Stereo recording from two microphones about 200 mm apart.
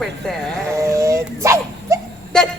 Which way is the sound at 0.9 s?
15° right (ahead or behind).